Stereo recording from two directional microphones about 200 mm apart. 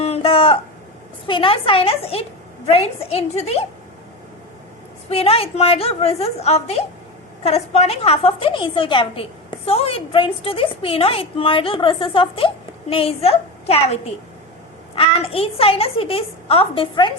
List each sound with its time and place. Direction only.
0.0 s a sound: 30° left (ahead or behind)
1.3 s a woman's voice: 25° left (ahead or behind)
5.0 s a woman's voice: 30° left (ahead or behind)